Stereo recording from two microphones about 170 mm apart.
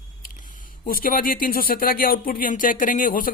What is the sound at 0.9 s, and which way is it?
Speech, 60° left (ahead or behind).